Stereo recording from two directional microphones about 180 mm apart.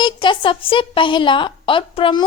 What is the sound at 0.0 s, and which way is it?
A woman's voice, 25° left (ahead or behind).